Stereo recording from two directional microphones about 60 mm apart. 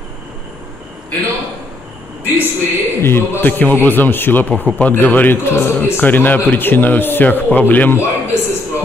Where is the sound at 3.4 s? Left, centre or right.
Left.